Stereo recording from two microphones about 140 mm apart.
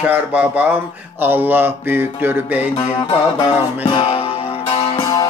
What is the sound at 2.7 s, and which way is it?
Music, 30° left (ahead or behind).